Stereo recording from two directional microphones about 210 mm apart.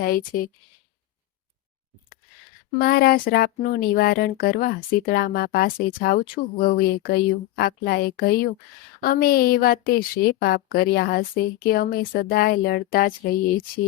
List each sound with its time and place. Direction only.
0.0 s a woman's voice: 40° left (ahead or behind)
2.8 s a woman's voice: 45° left (ahead or behind)